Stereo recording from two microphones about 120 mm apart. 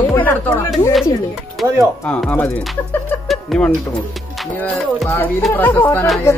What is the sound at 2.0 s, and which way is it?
Speech, 10° left (ahead or behind).